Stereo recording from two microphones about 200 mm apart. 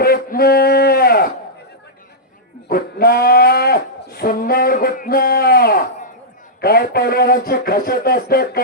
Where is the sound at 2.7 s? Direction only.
50° left (ahead or behind).